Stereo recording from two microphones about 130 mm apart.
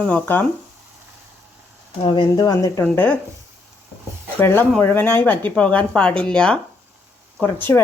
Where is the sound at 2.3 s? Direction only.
25° left (ahead or behind).